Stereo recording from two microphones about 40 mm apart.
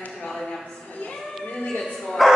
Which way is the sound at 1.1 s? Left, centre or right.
Centre.